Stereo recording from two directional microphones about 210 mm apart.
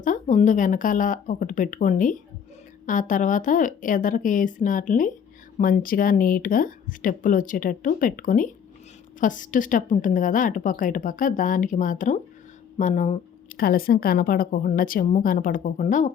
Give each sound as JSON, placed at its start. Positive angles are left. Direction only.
{"t": 0.0, "sound": "a woman's voice", "side_deg": 35}
{"t": 13.6, "sound": "a woman's voice", "side_deg": 45}